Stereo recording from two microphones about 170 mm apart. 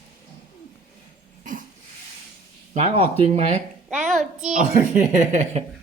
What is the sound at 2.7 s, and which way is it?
Speech, 40° right (ahead or behind).